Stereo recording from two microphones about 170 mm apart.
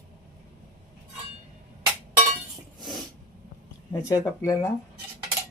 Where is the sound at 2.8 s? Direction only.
Centre (ahead or behind).